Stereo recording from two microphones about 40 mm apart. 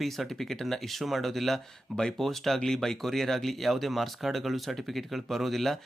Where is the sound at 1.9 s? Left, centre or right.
Centre.